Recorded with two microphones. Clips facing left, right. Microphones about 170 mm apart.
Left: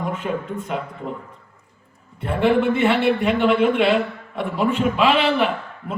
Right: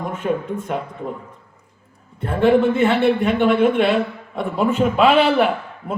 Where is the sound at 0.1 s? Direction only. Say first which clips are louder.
Right 3 dB; 50° right (ahead or behind).